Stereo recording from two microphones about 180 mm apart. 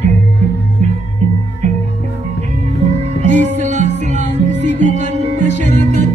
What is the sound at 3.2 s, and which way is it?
Music, 40° right (ahead or behind).